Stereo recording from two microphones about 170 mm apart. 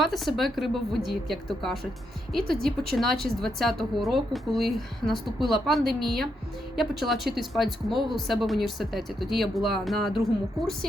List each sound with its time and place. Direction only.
0.0 s a woman's voice: centre (ahead or behind)
2.4 s a woman's voice: 60° right (ahead or behind)
2.9 s a woman's voice: centre (ahead or behind)